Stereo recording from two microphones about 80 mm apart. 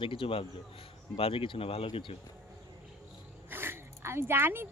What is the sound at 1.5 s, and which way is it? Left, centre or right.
Speech, left.